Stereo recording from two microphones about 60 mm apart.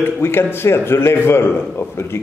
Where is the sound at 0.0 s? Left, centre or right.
Left.